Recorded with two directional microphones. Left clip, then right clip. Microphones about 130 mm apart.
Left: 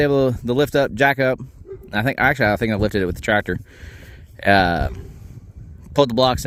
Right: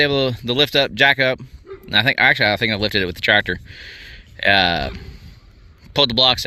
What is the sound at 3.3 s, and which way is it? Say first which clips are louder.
Speech: right 5 dB; 55° left (ahead or behind).